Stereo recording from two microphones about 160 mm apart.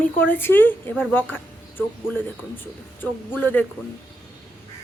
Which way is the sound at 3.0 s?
10° left (ahead or behind).